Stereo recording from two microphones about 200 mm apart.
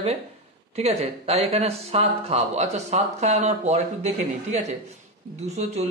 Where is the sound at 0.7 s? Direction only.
30° right (ahead or behind).